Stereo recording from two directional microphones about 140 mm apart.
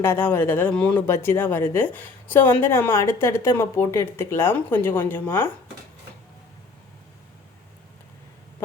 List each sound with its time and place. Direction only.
0.0 s a woman's voice: 15° left (ahead or behind)
1.0 s a woman's voice: 20° left (ahead or behind)